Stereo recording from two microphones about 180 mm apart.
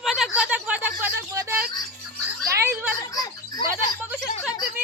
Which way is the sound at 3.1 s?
20° left (ahead or behind).